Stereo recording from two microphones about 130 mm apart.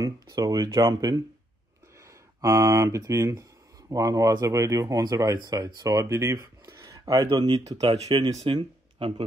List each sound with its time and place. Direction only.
0.0 s speech: 25° right (ahead or behind)
2.4 s speech: 20° right (ahead or behind)
8.5 s speech: 40° right (ahead or behind)